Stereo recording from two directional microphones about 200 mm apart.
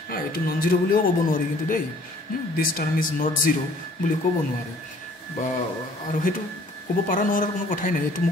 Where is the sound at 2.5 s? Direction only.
45° left (ahead or behind).